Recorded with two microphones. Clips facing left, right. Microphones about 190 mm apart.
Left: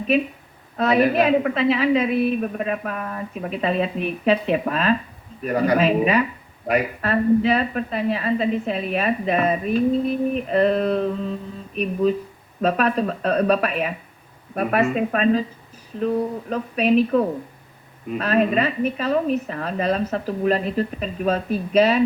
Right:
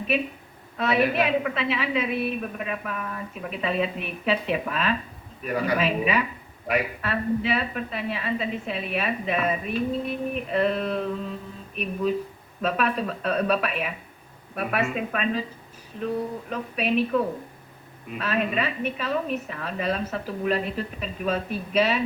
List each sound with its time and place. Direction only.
0.8 s a woman's voice: 40° left (ahead or behind)
12.6 s a woman's voice: 40° left (ahead or behind)
16.5 s a woman's voice: 40° left (ahead or behind)